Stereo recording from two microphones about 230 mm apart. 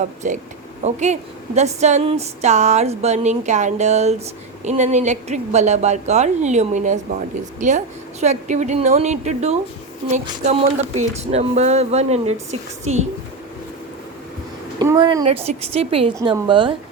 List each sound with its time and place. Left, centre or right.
0.2 s a woman's voice: right
14.8 s speech: centre